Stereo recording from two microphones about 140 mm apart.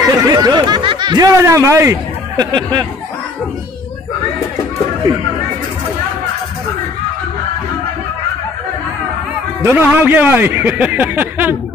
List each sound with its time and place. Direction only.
0.2 s speech: 25° right (ahead or behind)
1.4 s speech: 20° right (ahead or behind)
2.5 s speech: 30° right (ahead or behind)
9.6 s speech: 15° right (ahead or behind)